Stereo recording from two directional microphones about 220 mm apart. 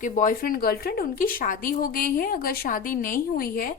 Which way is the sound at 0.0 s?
40° left (ahead or behind).